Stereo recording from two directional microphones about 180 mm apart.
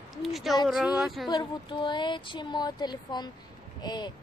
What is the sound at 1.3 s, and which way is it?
Speech, 25° left (ahead or behind).